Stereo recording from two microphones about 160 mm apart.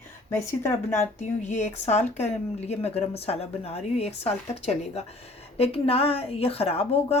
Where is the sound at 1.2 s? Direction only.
45° left (ahead or behind).